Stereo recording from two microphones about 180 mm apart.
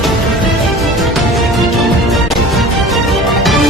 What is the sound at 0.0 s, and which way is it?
Music, centre (ahead or behind).